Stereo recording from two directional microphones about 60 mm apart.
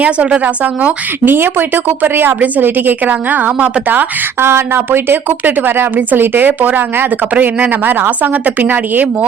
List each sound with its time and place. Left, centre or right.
0.0 s speech: centre
4.4 s speech: right